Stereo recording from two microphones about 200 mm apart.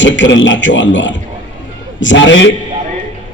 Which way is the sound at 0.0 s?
65° left (ahead or behind).